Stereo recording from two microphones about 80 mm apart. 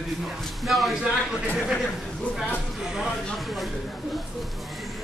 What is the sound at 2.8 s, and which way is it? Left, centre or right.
Speech, centre.